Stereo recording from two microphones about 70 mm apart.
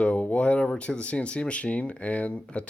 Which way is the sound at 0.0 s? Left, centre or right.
Centre.